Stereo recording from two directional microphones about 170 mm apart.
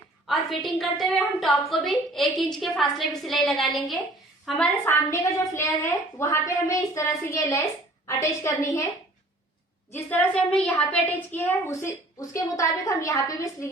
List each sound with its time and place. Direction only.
0.6 s a woman's voice: centre (ahead or behind); by 8.9 s 20° left (ahead or behind)
9.9 s a woman's voice: 10° left (ahead or behind)